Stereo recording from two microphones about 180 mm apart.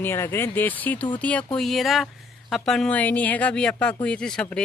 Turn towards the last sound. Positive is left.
turn(degrees=5)  # may be behind; listen again after turning